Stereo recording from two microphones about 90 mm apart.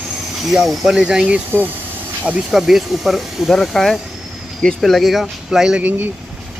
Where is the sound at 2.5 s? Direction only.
5° right (ahead or behind).